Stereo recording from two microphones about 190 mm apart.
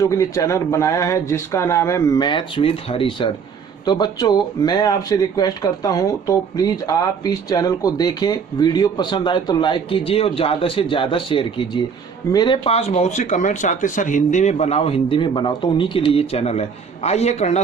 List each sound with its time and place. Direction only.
0.0 s speech: 15° left (ahead or behind); by 17.6 s 35° left (ahead or behind)